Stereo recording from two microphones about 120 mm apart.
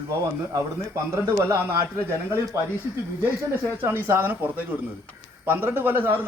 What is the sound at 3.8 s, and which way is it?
Speech, 15° right (ahead or behind).